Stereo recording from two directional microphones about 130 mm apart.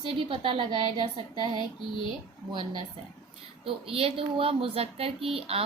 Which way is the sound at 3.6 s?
45° right (ahead or behind).